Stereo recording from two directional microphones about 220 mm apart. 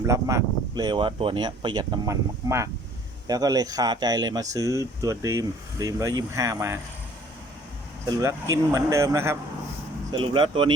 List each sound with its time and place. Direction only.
0.0 s speech: 15° right (ahead or behind)
8.2 s speech: 15° right (ahead or behind)